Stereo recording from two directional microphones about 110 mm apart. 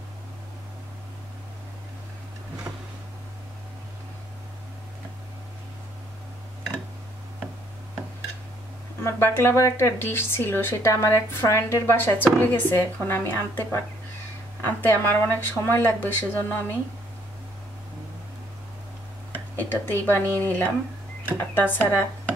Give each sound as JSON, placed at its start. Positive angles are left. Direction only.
{"t": 2.7, "sound": "a sound", "side_deg": -20}
{"t": 9.0, "sound": "a woman's voice", "side_deg": 20}
{"t": 19.5, "sound": "speech", "side_deg": 15}